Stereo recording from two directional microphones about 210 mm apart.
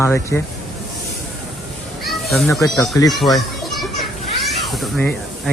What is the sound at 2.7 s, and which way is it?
A child's voice, centre (ahead or behind).